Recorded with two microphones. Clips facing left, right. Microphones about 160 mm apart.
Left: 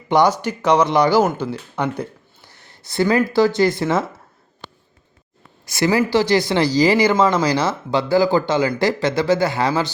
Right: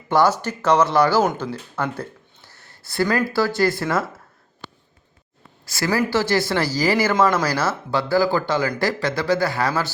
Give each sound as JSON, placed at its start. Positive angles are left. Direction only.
{"t": 0.1, "sound": "speech", "side_deg": 15}
{"t": 5.6, "sound": "speech", "side_deg": 20}